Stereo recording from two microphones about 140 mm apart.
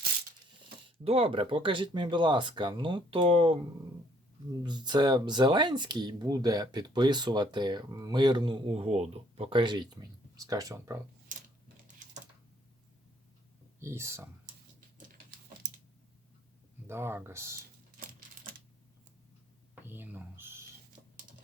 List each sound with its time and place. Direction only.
0.9 s speech: 40° right (ahead or behind)
4.6 s speech: 30° right (ahead or behind)
13.8 s speech: 20° right (ahead or behind)
16.8 s speech: 15° right (ahead or behind)
19.8 s a sound: 15° right (ahead or behind)